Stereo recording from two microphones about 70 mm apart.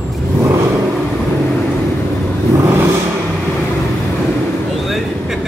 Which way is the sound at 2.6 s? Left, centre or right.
Right.